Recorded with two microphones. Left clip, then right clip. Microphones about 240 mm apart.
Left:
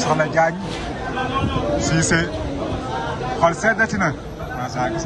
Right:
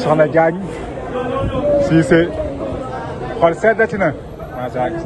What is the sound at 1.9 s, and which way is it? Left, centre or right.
Speech, centre.